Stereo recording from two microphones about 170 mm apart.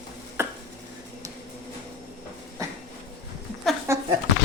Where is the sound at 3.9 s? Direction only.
15° right (ahead or behind).